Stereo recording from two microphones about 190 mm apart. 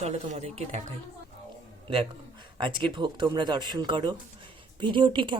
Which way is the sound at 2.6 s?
25° right (ahead or behind).